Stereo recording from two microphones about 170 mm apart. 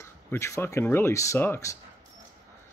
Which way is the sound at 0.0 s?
15° left (ahead or behind).